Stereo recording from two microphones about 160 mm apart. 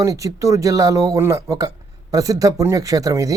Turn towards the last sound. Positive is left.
turn(degrees=-20)  # may be behind; listen again after turning